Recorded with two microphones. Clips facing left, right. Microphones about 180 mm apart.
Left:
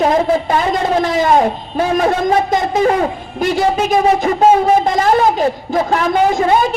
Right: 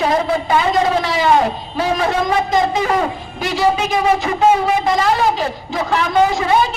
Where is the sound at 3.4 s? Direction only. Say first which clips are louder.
Left 2 dB; 50° left (ahead or behind).